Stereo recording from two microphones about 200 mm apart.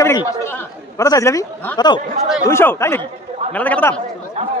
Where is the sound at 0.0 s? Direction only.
15° left (ahead or behind).